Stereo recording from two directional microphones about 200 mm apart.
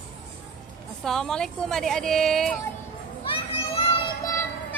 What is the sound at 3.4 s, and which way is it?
Children playing, 30° left (ahead or behind).